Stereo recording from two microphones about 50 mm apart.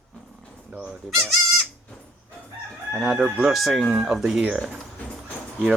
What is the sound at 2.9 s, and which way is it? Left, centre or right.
Chicken, centre.